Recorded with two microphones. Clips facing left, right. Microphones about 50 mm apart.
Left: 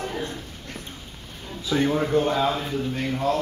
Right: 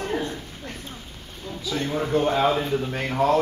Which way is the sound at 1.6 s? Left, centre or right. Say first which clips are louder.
Left 5 dB; left.